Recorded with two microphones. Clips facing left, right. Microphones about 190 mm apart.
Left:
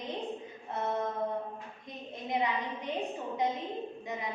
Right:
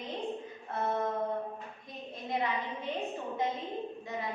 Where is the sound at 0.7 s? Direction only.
20° left (ahead or behind).